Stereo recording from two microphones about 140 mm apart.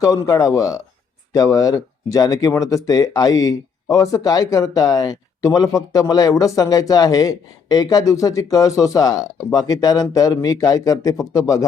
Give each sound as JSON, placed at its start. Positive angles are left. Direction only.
{"t": 0.0, "sound": "speech", "side_deg": 25}